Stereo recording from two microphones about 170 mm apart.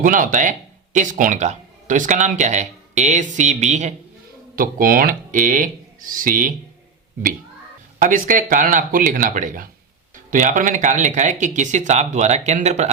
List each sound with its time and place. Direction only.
0.0 s speech: 50° right (ahead or behind)
4.5 s speech: 55° right (ahead or behind)
7.9 s speech: 50° right (ahead or behind)